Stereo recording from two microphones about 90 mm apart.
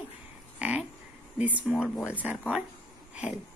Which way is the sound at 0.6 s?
15° right (ahead or behind).